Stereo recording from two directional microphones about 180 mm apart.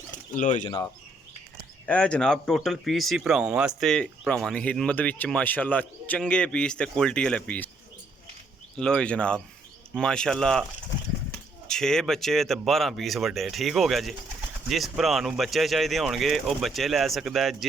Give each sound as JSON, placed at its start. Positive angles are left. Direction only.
{"t": 0.3, "sound": "speech", "side_deg": 45}
{"t": 0.6, "sound": "speech", "side_deg": 20}
{"t": 1.9, "sound": "speech", "side_deg": 5}
{"t": 8.7, "sound": "speech", "side_deg": 5}
{"t": 11.7, "sound": "speech", "side_deg": 5}